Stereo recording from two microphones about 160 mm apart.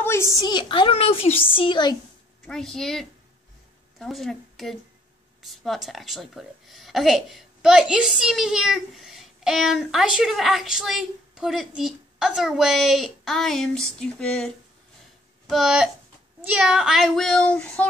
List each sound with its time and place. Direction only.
0.0 s a woman's voice: 15° left (ahead or behind)
2.4 s a woman's voice: 5° left (ahead or behind)